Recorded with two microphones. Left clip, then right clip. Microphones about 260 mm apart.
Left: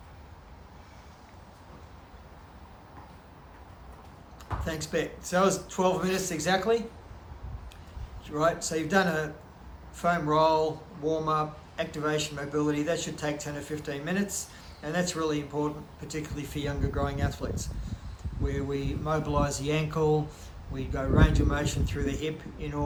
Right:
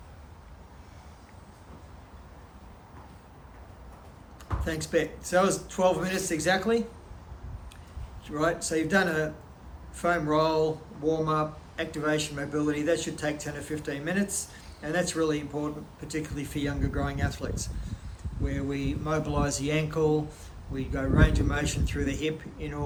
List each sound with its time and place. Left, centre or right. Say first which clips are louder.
4.6 s speech: right 3 dB; centre
8.3 s speech: left 1 dB; centre